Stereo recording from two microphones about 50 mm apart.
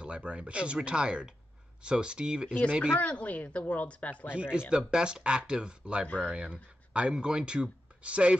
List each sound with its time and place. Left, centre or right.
0.0 s speech: right
3.0 s speech: left
4.4 s speech: centre
6.0 s speech: left
6.3 s speech: right